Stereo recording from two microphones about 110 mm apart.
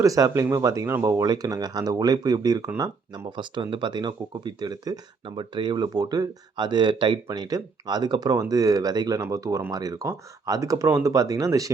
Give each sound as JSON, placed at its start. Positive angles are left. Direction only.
{"t": 0.0, "sound": "speech", "side_deg": -30}
{"t": 1.2, "sound": "speech", "side_deg": -35}
{"t": 3.2, "sound": "speech", "side_deg": -45}